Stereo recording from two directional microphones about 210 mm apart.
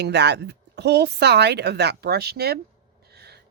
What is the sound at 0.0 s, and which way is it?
Speech, 55° right (ahead or behind).